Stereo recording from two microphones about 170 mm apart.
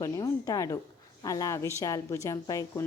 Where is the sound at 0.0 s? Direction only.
20° left (ahead or behind).